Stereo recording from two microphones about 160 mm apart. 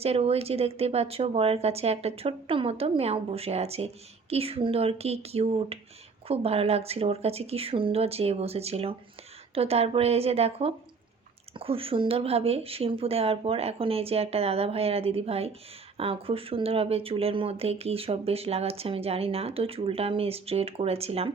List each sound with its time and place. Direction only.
0.0 s speech: 40° right (ahead or behind)